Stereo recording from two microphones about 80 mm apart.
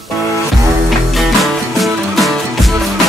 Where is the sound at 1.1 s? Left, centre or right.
Centre.